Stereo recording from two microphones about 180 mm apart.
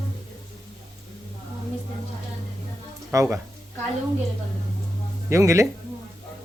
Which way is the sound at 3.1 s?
15° right (ahead or behind).